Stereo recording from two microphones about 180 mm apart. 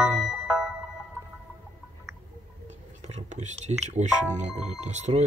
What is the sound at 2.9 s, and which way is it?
Speech, 40° right (ahead or behind).